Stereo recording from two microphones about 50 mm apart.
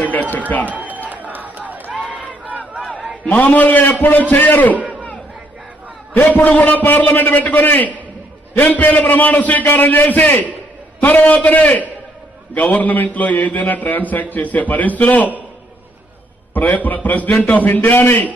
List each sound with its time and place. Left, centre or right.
0.0 s run: left
0.7 s a sound: right
2.4 s crowd: right
3.3 s a man's voice: left
4.7 s a sound: right
6.1 s a man's voice: left
16.5 s a man's voice: left